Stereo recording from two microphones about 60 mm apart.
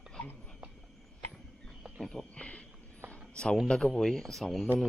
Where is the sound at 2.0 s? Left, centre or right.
Centre.